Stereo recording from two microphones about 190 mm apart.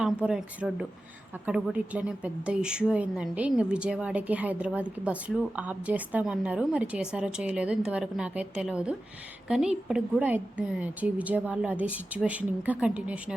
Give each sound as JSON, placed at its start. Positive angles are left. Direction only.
{"t": 0.0, "sound": "a woman's voice", "side_deg": -5}